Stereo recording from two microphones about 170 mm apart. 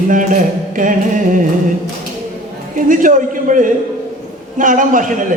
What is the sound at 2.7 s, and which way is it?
A man's voice, 50° right (ahead or behind).